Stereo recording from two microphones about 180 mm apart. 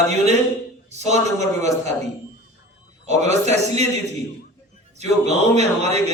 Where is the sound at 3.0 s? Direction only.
40° right (ahead or behind).